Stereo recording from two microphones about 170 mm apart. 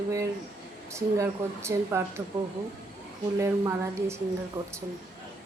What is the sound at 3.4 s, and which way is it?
Speech, 15° right (ahead or behind).